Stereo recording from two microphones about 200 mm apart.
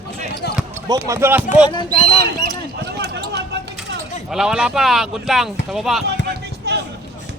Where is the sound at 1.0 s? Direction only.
10° right (ahead or behind).